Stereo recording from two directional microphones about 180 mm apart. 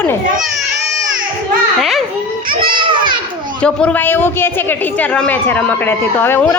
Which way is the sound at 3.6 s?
5° left (ahead or behind).